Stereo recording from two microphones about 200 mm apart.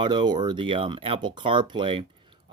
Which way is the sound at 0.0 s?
20° right (ahead or behind).